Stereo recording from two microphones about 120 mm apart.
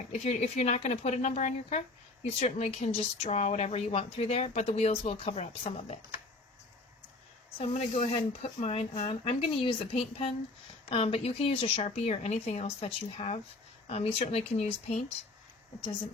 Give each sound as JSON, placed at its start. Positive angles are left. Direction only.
{"t": 0.1, "sound": "speech", "side_deg": 70}
{"t": 2.4, "sound": "speech", "side_deg": 65}
{"t": 7.6, "sound": "speech", "side_deg": 70}